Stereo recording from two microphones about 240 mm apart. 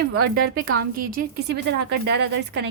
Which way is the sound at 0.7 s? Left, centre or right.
Right.